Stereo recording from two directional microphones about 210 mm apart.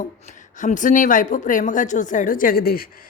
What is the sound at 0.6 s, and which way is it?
A woman's voice, 35° left (ahead or behind).